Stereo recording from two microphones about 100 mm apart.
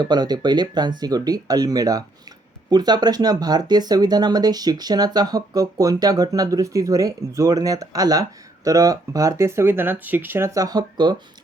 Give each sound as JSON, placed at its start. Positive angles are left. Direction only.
{"t": 0.0, "sound": "speech", "side_deg": -45}
{"t": 10.6, "sound": "speech", "side_deg": -40}